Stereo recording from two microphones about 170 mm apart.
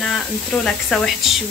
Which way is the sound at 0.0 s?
5° left (ahead or behind).